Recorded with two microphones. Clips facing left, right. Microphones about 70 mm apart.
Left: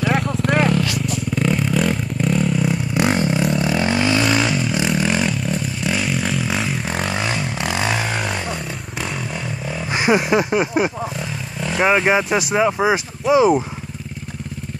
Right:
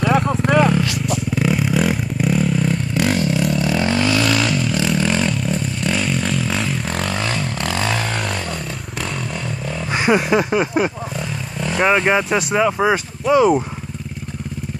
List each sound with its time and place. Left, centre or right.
0.7 s vehicle: centre
1.3 s motorcycle: centre
2.9 s vehicle: left; by 12.6 s centre
12.7 s speech: centre